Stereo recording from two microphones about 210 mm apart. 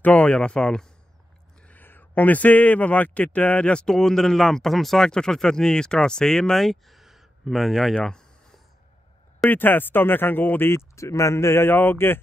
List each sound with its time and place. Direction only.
0.0 s a man's voice: 5° left (ahead or behind)